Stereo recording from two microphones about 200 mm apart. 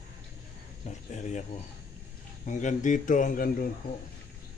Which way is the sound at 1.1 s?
35° left (ahead or behind).